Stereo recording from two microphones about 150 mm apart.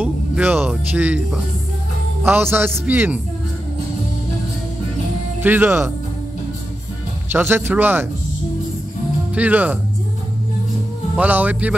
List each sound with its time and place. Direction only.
0.0 s speech: 10° right (ahead or behind)
5.4 s speech: 10° right (ahead or behind)
7.3 s speech: 15° right (ahead or behind)
9.3 s speech: 10° right (ahead or behind)
11.1 s speech: 10° right (ahead or behind)